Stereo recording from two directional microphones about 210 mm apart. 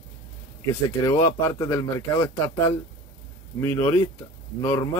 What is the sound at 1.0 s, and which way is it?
Speech, 15° left (ahead or behind).